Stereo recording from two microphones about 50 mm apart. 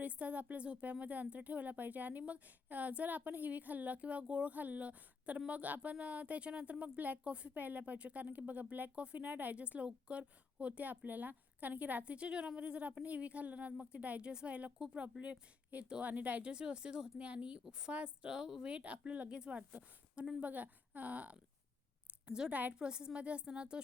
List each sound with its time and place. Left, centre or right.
0.0 s a woman's voice: right
16.4 s a woman's voice: centre
22.3 s a woman's voice: centre